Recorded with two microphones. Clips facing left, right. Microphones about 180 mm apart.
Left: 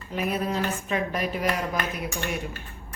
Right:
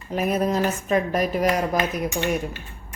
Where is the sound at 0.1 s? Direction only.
40° right (ahead or behind).